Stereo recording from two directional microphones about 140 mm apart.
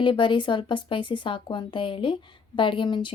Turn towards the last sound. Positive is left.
turn(degrees=35)  # may be behind; listen again after turning